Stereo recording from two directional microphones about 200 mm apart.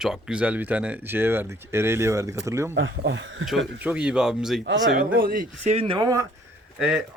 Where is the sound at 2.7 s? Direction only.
65° right (ahead or behind).